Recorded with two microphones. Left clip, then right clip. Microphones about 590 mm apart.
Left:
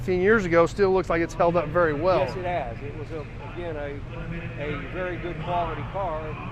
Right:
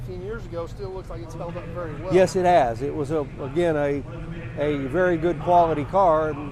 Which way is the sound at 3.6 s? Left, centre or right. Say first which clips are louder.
Right 11 dB; right.